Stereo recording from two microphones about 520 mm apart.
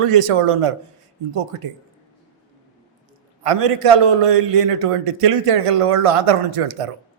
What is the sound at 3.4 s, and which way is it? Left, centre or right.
A man's voice, right.